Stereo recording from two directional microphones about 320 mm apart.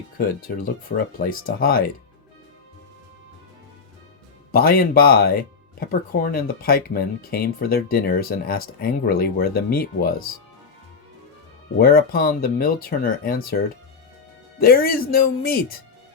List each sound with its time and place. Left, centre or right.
0.2 s speech: left
4.5 s speech: left
11.8 s speech: left
14.6 s speech: left